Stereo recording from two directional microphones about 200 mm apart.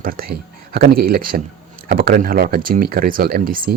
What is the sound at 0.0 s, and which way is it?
Speech, 45° right (ahead or behind).